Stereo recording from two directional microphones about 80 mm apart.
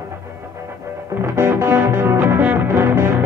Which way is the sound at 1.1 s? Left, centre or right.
Right.